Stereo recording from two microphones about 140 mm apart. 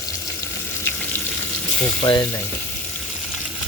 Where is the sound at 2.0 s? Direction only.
35° left (ahead or behind).